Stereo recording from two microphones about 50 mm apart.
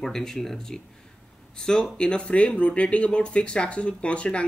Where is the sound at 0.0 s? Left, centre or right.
Centre.